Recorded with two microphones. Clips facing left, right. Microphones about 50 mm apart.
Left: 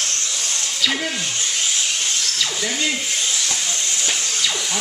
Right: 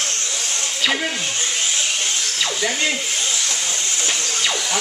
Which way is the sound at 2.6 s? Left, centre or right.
Centre.